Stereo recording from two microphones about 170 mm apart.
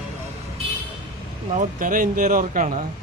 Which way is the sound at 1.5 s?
50° right (ahead or behind).